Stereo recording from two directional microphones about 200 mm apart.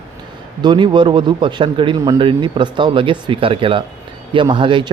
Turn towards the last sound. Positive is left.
turn(degrees=-25)  # may be behind; listen again after turning